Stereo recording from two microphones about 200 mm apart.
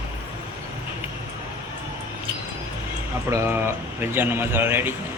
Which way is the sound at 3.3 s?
10° right (ahead or behind).